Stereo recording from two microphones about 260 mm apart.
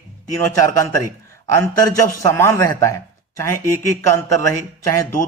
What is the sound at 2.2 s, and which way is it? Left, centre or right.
Speech, centre.